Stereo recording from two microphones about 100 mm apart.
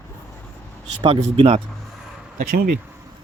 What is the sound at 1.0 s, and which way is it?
Speech, 75° right (ahead or behind).